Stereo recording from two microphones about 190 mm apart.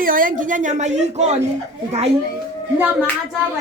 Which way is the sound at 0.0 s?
45° right (ahead or behind).